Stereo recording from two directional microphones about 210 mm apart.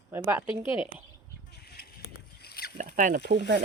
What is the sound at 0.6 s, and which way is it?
Speech, 25° left (ahead or behind).